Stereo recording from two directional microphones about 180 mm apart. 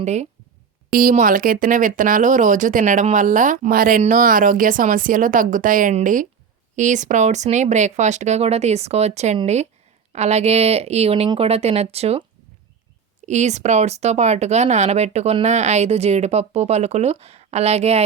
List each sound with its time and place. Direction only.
0.0 s speech: 40° right (ahead or behind)
0.9 s speech: 50° right (ahead or behind); by 12.2 s 35° right (ahead or behind)
13.2 s speech: 40° right (ahead or behind)